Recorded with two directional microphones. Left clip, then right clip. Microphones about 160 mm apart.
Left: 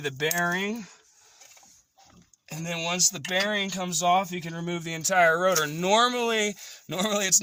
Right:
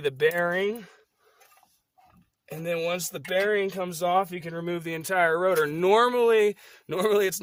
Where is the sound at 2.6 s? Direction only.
35° right (ahead or behind).